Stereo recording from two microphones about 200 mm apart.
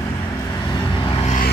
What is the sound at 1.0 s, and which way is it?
Vehicle, 25° left (ahead or behind).